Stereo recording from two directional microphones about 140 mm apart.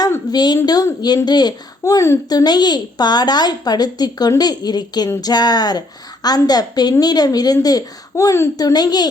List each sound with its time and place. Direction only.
0.0 s a woman's voice: 30° left (ahead or behind)